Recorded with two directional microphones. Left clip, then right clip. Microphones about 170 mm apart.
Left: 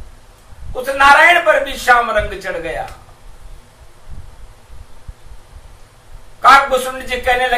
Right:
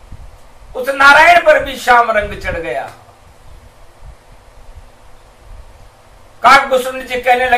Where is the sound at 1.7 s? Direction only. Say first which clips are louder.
Right 2 dB; 15° right (ahead or behind).